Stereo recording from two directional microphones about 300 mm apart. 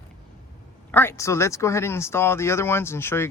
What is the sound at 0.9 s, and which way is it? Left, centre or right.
Speech, centre.